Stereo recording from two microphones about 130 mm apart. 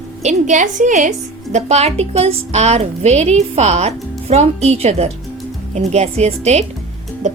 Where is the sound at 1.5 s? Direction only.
60° right (ahead or behind).